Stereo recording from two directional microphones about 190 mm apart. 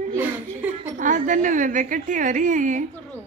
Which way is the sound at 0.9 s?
40° right (ahead or behind).